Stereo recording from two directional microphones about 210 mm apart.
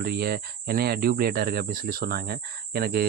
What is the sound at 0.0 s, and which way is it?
Speech, 45° right (ahead or behind).